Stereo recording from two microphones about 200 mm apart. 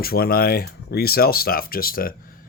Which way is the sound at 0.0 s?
50° left (ahead or behind).